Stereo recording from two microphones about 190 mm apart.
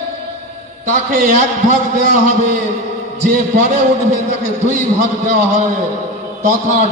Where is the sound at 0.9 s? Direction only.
40° right (ahead or behind).